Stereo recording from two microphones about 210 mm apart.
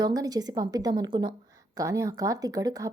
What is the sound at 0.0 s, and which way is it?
A woman's voice, 15° right (ahead or behind).